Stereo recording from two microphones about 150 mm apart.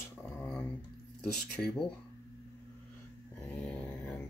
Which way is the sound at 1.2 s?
5° left (ahead or behind).